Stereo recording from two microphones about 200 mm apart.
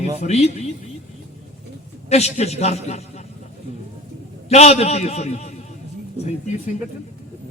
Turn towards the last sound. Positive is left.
turn(degrees=35)  # may be behind; listen again after turning